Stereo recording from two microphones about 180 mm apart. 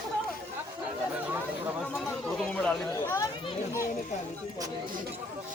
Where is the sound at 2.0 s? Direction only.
5° left (ahead or behind).